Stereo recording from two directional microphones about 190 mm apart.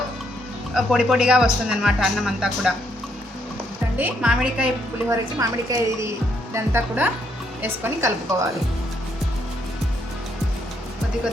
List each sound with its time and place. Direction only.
0.7 s speech: centre (ahead or behind)
3.9 s speech: 5° right (ahead or behind)
5.4 s a woman's voice: 20° right (ahead or behind)